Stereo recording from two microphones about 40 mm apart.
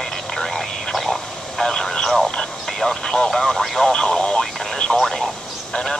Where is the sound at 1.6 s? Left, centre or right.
Centre.